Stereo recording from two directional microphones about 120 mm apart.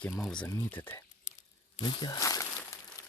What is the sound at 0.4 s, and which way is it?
Speech, 20° left (ahead or behind).